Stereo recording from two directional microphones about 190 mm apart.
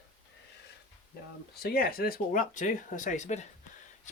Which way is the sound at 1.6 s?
55° left (ahead or behind).